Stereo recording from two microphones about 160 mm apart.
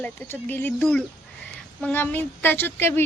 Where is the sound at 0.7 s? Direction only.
Centre (ahead or behind).